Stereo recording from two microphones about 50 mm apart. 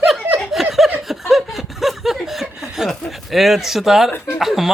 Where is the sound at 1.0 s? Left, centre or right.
Centre.